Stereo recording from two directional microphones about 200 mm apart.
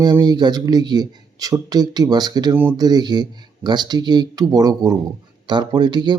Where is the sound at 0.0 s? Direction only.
20° right (ahead or behind).